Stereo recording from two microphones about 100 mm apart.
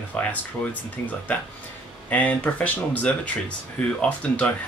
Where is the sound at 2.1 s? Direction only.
15° left (ahead or behind).